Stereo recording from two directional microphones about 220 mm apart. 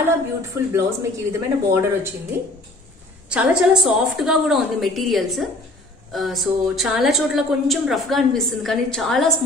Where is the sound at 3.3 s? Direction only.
5° right (ahead or behind).